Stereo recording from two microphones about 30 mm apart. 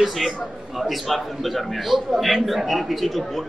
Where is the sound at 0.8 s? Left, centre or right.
Centre.